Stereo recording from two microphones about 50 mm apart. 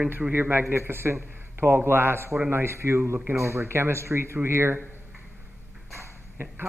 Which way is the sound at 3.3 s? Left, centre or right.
Right.